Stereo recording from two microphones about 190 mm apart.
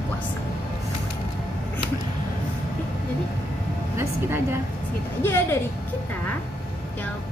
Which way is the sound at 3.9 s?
15° right (ahead or behind).